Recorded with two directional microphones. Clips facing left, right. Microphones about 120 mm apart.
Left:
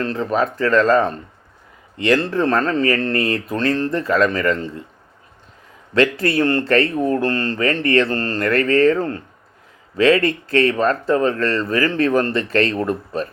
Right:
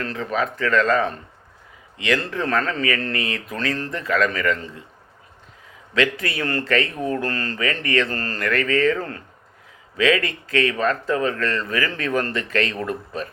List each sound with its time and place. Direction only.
0.0 s speech: 35° left (ahead or behind)
5.9 s speech: 40° left (ahead or behind)